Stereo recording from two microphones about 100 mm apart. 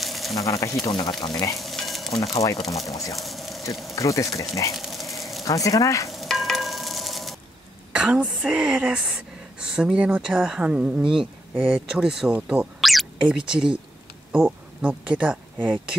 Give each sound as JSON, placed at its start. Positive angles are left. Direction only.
{"t": 0.0, "sound": "a sound", "side_deg": 0}
{"t": 0.4, "sound": "speech", "side_deg": 35}
{"t": 0.8, "sound": "speech", "side_deg": 45}
{"t": 1.6, "sound": "stir", "side_deg": 0}
{"t": 2.3, "sound": "speech", "side_deg": 35}
{"t": 3.2, "sound": "insect", "side_deg": 0}
{"t": 3.9, "sound": "speech", "side_deg": 30}
{"t": 4.7, "sound": "a sound", "side_deg": 0}
{"t": 5.4, "sound": "speech", "side_deg": 35}
{"t": 6.1, "sound": "a sound", "side_deg": 0}
{"t": 7.9, "sound": "speech", "side_deg": -10}
{"t": 12.8, "sound": "a sound", "side_deg": -5}
{"t": 13.5, "sound": "speech", "side_deg": -5}